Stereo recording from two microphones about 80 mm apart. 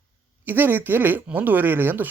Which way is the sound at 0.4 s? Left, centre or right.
Right.